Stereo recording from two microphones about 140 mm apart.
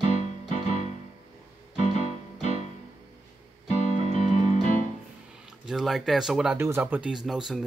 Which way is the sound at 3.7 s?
55° left (ahead or behind).